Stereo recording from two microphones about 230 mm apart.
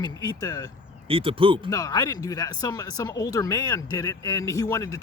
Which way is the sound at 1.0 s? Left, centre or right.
Right.